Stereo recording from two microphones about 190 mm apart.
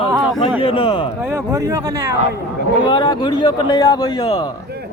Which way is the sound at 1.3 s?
15° right (ahead or behind).